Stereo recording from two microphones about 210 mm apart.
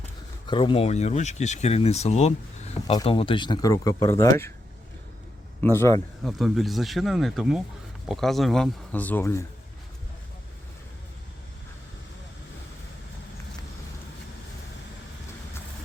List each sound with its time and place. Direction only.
0.4 s speech: 25° left (ahead or behind)
5.5 s a man's voice: 10° left (ahead or behind)
6.2 s speech: centre (ahead or behind)